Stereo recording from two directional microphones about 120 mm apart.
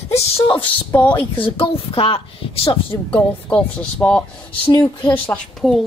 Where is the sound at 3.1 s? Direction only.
10° left (ahead or behind).